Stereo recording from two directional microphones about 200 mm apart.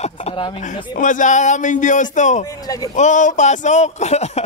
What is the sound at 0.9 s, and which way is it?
Speech, 40° left (ahead or behind).